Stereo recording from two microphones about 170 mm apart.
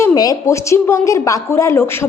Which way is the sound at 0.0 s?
20° left (ahead or behind).